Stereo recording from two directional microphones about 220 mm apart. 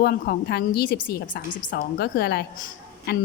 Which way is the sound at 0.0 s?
45° left (ahead or behind).